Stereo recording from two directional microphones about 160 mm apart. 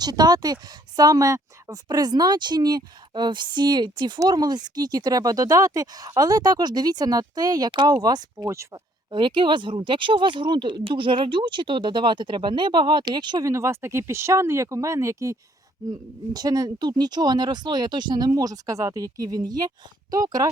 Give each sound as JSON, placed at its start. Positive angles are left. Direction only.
{"t": 0.0, "sound": "speech", "side_deg": -25}
{"t": 9.0, "sound": "speech", "side_deg": -30}